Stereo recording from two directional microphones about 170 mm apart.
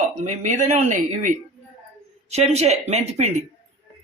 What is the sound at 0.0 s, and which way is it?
Speech, 45° right (ahead or behind).